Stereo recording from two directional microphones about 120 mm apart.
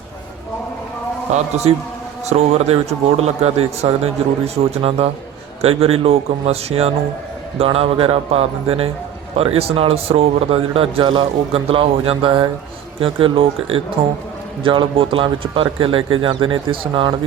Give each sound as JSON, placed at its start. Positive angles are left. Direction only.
{"t": 1.3, "sound": "a man's voice", "side_deg": -65}